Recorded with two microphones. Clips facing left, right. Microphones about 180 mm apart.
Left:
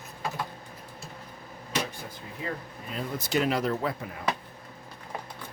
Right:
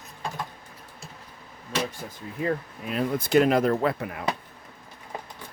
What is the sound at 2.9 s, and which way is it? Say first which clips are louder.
Speech: right 7 dB; 60° right (ahead or behind).